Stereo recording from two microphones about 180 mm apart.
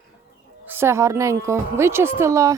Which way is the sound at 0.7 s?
15° right (ahead or behind).